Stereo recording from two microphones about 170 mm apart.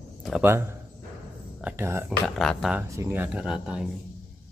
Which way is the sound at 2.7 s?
15° right (ahead or behind).